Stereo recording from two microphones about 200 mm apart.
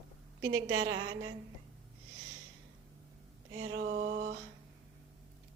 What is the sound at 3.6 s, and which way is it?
Speech, 75° right (ahead or behind).